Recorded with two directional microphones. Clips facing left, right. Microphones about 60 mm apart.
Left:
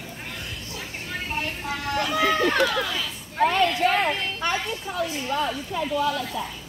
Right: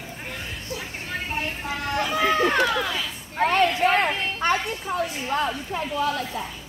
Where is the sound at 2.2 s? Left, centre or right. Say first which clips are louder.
Right 1 dB; right.